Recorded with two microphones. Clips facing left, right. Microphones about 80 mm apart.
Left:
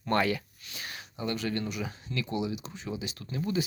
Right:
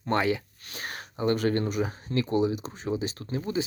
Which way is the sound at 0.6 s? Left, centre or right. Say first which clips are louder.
Right 5 dB; right.